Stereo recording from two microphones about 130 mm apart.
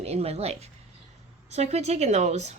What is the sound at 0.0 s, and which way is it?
Speech, 50° right (ahead or behind).